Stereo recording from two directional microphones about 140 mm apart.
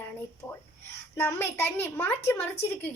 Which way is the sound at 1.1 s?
15° left (ahead or behind).